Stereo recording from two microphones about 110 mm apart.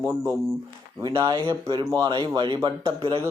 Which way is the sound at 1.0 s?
35° right (ahead or behind).